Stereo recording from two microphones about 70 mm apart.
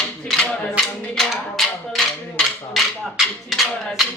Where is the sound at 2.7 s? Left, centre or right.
Centre.